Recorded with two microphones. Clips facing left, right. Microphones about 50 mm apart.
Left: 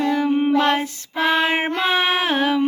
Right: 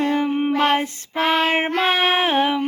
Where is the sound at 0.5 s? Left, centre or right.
Right.